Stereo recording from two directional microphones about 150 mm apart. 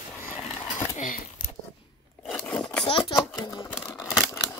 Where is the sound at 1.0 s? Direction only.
65° left (ahead or behind).